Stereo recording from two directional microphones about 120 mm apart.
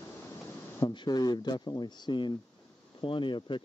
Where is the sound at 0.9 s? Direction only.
35° left (ahead or behind).